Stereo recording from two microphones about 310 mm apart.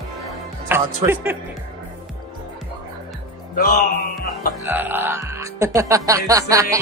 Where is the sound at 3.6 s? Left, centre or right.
Left.